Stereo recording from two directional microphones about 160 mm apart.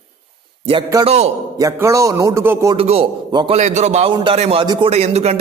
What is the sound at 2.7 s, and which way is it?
Speech, 35° right (ahead or behind).